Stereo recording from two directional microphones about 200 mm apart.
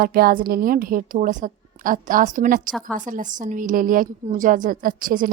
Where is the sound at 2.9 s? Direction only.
40° right (ahead or behind).